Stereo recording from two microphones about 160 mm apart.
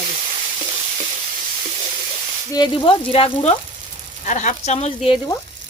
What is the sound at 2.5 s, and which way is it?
Speech, 30° left (ahead or behind).